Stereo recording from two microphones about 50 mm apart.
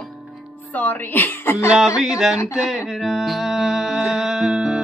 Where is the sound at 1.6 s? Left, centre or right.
Centre.